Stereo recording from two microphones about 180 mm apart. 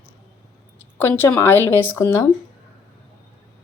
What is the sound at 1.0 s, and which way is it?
Speech, 10° left (ahead or behind).